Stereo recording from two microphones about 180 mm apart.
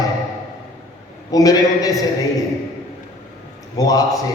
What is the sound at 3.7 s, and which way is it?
Speech, 20° left (ahead or behind).